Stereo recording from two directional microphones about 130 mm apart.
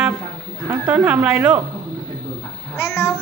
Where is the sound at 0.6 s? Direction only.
15° right (ahead or behind).